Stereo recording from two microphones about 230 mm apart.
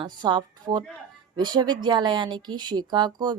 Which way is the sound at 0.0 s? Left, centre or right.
Centre.